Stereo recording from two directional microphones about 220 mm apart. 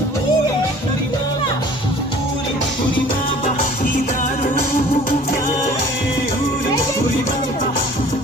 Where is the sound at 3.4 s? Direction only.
35° left (ahead or behind).